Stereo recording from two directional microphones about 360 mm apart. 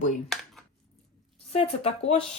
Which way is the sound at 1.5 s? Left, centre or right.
Centre.